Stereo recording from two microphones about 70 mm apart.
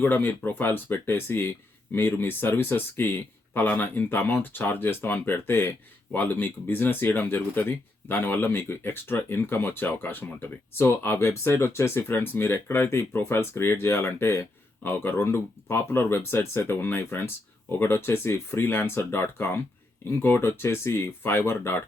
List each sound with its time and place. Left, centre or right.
0.0 s speech: left